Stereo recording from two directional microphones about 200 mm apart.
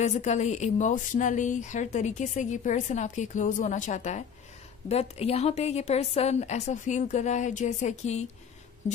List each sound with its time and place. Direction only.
0.0 s a woman's voice: 35° left (ahead or behind)